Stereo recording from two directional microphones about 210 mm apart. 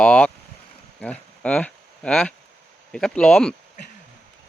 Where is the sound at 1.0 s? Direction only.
5° left (ahead or behind).